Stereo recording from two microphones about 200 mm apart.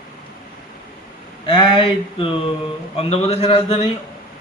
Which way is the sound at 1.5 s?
25° left (ahead or behind).